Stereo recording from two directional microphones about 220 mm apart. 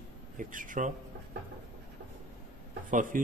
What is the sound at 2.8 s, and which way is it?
Speech, 35° right (ahead or behind).